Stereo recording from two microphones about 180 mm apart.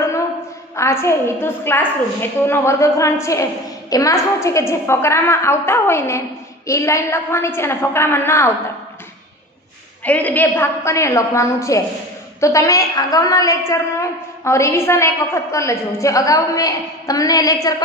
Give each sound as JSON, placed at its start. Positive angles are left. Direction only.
{"t": 0.7, "sound": "a woman's voice", "side_deg": 15}
{"t": 10.0, "sound": "a woman's voice", "side_deg": 10}